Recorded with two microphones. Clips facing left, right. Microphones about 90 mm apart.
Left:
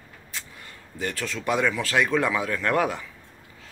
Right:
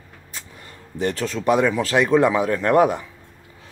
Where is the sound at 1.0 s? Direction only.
30° right (ahead or behind).